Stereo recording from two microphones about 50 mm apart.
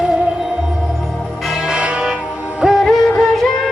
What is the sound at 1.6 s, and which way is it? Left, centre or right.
Music, centre.